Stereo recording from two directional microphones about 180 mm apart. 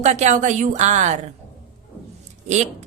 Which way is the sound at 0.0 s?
40° right (ahead or behind).